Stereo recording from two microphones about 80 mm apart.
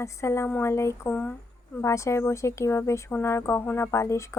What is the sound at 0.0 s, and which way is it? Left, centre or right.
Speech, left.